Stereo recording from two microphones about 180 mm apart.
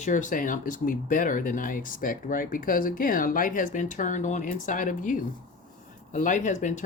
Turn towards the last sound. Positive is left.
turn(degrees=40)  # may be behind; listen again after turning